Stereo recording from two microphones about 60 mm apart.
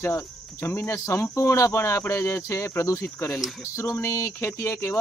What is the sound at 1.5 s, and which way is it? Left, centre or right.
Speech, left.